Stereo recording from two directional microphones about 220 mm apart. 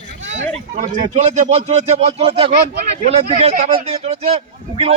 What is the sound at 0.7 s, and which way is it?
Speech, 30° right (ahead or behind).